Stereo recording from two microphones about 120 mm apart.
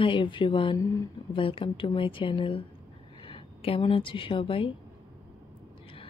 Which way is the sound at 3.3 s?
50° left (ahead or behind).